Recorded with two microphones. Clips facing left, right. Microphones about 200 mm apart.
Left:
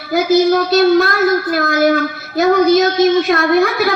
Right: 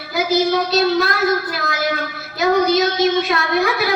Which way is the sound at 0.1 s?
50° left (ahead or behind).